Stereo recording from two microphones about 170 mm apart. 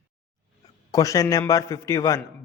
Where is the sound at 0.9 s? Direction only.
20° left (ahead or behind).